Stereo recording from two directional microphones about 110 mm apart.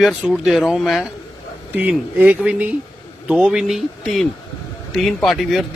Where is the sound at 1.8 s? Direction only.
15° right (ahead or behind).